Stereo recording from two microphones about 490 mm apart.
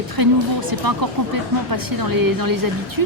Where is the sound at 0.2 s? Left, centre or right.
Right.